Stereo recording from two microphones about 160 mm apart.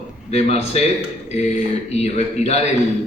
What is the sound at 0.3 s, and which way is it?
Speech, 40° left (ahead or behind).